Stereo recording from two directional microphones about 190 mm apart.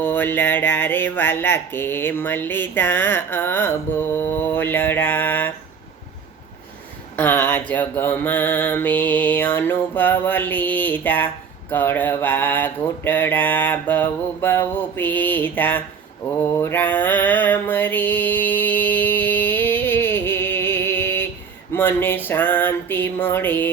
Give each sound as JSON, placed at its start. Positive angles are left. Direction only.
{"t": 0.0, "sound": "speech", "side_deg": 10}
{"t": 7.2, "sound": "speech", "side_deg": 10}
{"t": 16.4, "sound": "mantra", "side_deg": 10}
{"t": 21.7, "sound": "a sound", "side_deg": 10}